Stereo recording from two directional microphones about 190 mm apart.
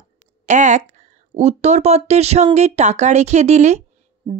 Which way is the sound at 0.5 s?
40° right (ahead or behind).